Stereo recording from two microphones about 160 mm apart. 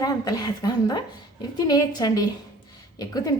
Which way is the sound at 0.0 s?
25° left (ahead or behind).